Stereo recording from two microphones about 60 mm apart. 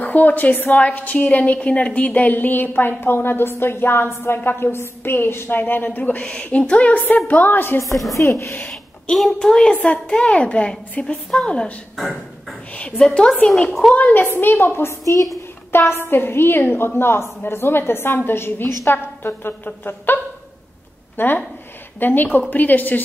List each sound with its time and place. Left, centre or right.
0.0 s a woman's voice: left
4.4 s a woman's voice: left
6.2 s a woman's voice: centre; by 7.8 s left
7.9 s a woman's voice: centre
8.2 s speech: left
9.1 s a child's voice: centre
12.7 s a child's voice: centre
14.2 s a woman's voice: left
21.2 s a woman's voice: left